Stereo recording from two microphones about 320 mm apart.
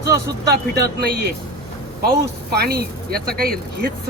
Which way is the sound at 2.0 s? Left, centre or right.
Right.